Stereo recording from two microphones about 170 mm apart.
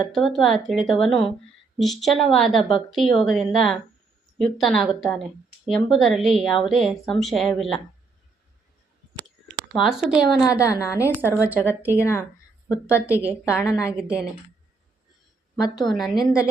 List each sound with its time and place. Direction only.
0.1 s a woman's voice: centre (ahead or behind)
9.7 s a woman's voice: centre (ahead or behind)
10.4 s a woman's voice: 20° left (ahead or behind)
11.2 s a woman's voice: 10° right (ahead or behind)
11.9 s speech: 15° left (ahead or behind)
13.9 s a woman's voice: 5° right (ahead or behind)
15.7 s a woman's voice: centre (ahead or behind)
16.1 s a woman's voice: 20° left (ahead or behind)